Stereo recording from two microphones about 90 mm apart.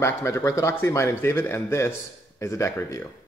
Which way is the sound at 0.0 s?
30° left (ahead or behind).